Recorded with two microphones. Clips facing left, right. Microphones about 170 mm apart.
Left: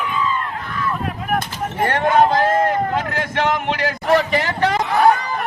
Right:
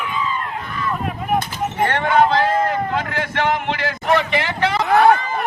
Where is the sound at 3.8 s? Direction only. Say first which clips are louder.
Left 3 dB; 40° left (ahead or behind).